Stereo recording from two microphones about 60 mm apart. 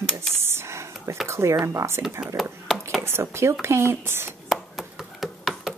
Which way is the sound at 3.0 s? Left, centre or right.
Right.